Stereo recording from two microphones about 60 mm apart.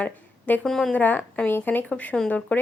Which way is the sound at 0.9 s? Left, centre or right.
Left.